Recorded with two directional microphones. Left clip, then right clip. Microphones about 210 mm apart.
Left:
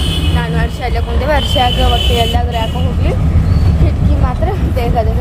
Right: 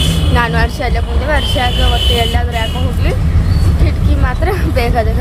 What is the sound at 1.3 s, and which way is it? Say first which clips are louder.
Speech: left 2 dB; 10° left (ahead or behind).